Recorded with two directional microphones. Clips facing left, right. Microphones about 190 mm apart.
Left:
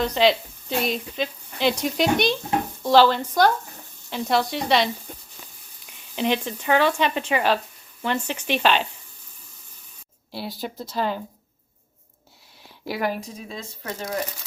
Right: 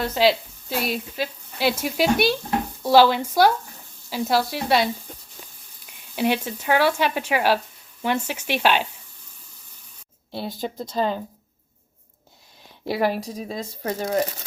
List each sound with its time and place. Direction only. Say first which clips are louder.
0.0 s speech: even; 5° right (ahead or behind)
10.3 s speech: right 2 dB; 20° right (ahead or behind)
12.8 s speech: right 4 dB; 30° right (ahead or behind)